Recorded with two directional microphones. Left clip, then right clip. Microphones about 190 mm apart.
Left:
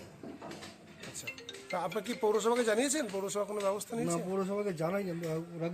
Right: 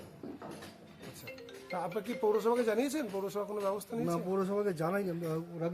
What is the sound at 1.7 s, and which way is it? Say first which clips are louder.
Speech: left 1 dB; 5° right (ahead or behind).